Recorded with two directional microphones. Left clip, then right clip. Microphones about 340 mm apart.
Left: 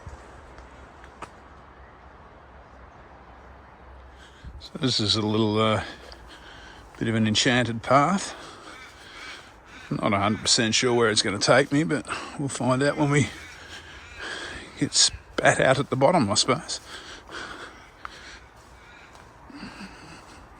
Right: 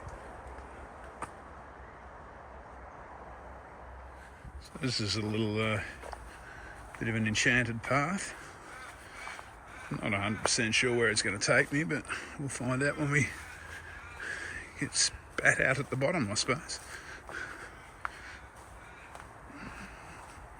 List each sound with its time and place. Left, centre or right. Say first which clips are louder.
4.8 s speech: left 10 dB; centre
5.2 s speech: left 10 dB; left
7.1 s speech: left 7 dB; left
7.3 s speech: left 4 dB; centre
10.0 s speech: left 8 dB; centre
14.6 s a sound: left 8 dB; centre
15.5 s speech: left 8 dB; centre